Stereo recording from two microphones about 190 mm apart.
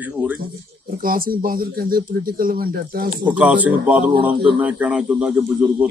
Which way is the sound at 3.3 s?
5° right (ahead or behind).